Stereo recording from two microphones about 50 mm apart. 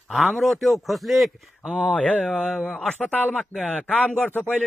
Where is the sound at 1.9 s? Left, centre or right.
Left.